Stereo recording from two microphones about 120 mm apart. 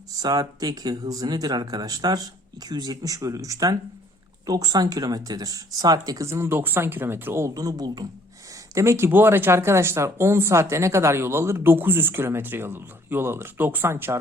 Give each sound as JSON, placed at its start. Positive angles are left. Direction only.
{"t": 0.2, "sound": "speech", "side_deg": -30}